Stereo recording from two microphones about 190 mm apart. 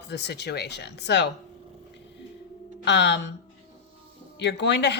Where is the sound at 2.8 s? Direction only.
65° left (ahead or behind).